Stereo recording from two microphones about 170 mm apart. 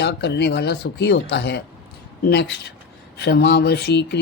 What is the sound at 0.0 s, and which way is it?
Speech, 90° left.